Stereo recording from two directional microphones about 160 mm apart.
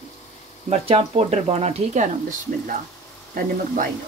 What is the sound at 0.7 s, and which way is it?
Speech, 40° right (ahead or behind).